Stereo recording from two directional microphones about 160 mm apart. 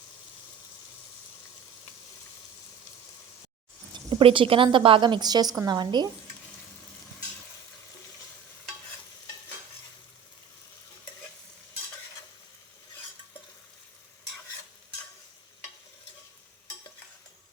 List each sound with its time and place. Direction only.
4.1 s a woman's voice: 35° right (ahead or behind)